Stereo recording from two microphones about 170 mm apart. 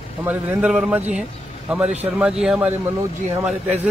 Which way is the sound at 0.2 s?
10° right (ahead or behind).